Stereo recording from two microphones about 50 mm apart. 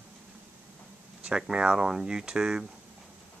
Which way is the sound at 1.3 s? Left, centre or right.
Centre.